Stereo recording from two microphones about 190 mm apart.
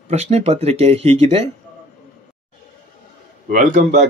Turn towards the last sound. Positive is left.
turn(degrees=-45)  # may be behind; listen again after turning